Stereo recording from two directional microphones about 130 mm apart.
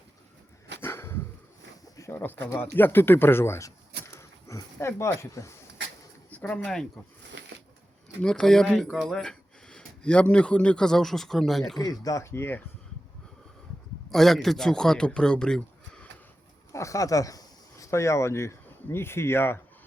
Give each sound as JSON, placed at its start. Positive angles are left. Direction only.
{"t": 0.8, "sound": "a sound", "side_deg": 20}
{"t": 2.0, "sound": "speech", "side_deg": 20}
{"t": 6.3, "sound": "speech", "side_deg": 10}
{"t": 8.2, "sound": "speech", "side_deg": 5}
{"t": 11.8, "sound": "speech", "side_deg": 30}
{"t": 14.1, "sound": "a man's voice", "side_deg": 0}
{"t": 16.7, "sound": "speech", "side_deg": 25}